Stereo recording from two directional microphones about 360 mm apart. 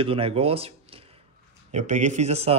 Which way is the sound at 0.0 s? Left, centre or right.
Centre.